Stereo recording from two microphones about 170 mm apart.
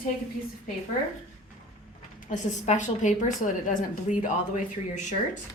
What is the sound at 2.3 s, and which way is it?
A woman's voice, 45° left (ahead or behind).